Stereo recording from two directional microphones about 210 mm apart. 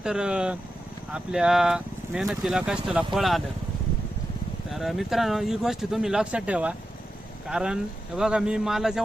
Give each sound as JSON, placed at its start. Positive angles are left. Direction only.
{"t": 0.0, "sound": "speech", "side_deg": -5}
{"t": 4.7, "sound": "speech", "side_deg": 0}